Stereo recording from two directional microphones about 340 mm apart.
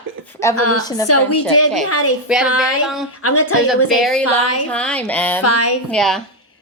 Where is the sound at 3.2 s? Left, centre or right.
Left.